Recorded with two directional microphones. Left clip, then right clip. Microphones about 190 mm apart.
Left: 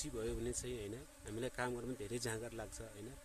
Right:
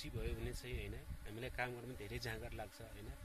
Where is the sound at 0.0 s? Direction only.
35° left (ahead or behind).